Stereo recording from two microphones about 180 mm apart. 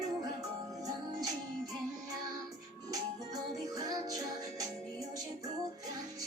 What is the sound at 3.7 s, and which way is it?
Music, 20° right (ahead or behind).